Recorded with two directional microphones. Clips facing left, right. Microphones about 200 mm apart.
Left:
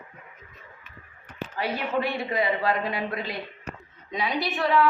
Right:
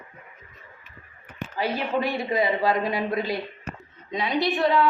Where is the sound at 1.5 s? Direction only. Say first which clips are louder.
Right 2 dB; 35° right (ahead or behind).